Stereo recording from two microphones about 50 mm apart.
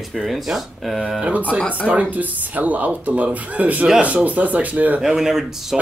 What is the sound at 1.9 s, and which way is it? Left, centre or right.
Speech, right.